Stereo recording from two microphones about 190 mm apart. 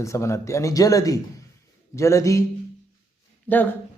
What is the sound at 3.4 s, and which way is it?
Speech, 10° left (ahead or behind).